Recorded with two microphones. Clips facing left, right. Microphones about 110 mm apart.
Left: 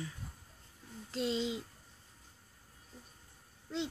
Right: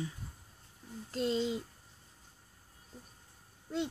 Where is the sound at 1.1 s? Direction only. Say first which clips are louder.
Right 2 dB; 45° right (ahead or behind).